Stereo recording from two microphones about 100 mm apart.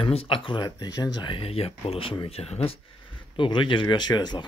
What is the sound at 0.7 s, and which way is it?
Speech, 40° left (ahead or behind).